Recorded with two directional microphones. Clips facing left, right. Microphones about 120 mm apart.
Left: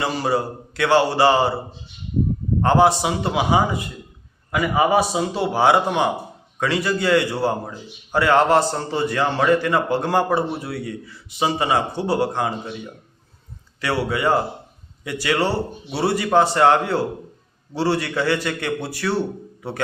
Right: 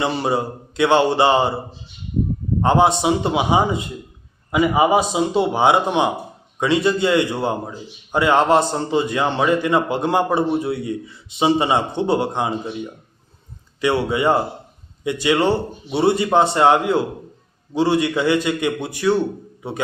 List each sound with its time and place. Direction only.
0.0 s a man's voice: 20° right (ahead or behind)
2.6 s a man's voice: 20° right (ahead or behind)